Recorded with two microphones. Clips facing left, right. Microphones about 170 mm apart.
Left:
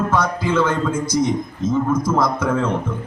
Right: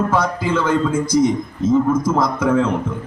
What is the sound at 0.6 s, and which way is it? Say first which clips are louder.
Speech: right 3 dB; 10° right (ahead or behind).